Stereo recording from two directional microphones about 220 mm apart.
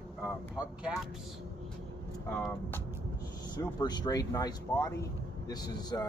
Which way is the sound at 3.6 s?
20° left (ahead or behind).